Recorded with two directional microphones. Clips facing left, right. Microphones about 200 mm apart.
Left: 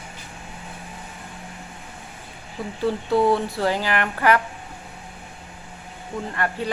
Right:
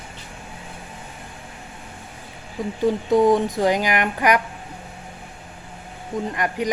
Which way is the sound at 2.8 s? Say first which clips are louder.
Right 3 dB; 15° right (ahead or behind).